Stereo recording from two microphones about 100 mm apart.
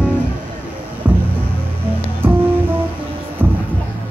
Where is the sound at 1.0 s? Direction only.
20° right (ahead or behind).